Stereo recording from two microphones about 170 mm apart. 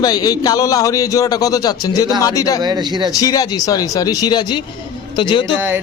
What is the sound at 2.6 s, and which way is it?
Speech, 25° right (ahead or behind).